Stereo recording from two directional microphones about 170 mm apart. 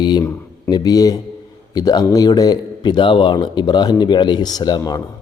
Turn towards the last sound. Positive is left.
turn(degrees=25)  # may be behind; listen again after turning